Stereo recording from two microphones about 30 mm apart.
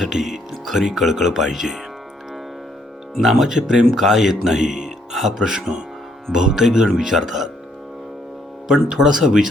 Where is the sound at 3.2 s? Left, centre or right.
Centre.